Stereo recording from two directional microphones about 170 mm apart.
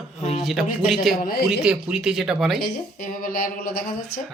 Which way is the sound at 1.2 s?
65° left (ahead or behind).